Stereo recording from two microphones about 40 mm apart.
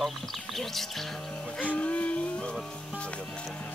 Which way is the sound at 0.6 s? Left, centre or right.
Centre.